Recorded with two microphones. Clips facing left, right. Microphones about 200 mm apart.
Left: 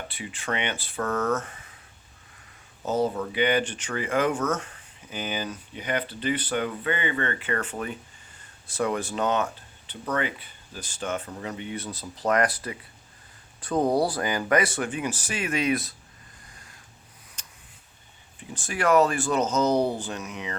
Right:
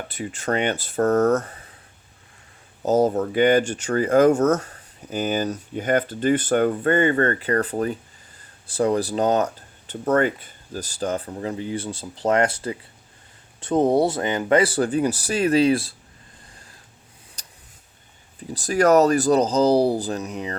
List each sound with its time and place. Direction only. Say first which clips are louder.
0.1 s speech: right 9 dB; 45° right (ahead or behind)
2.8 s speech: right 7 dB; 40° right (ahead or behind)
17.4 s a sound: right 2 dB; 35° right (ahead or behind)
18.3 s speech: right 10 dB; 40° right (ahead or behind)